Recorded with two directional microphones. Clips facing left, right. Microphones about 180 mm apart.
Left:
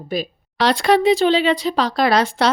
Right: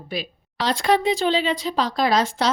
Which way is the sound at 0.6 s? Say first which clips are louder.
Left 5 dB; 75° left (ahead or behind).